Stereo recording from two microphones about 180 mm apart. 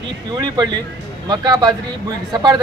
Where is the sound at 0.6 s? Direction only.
25° right (ahead or behind).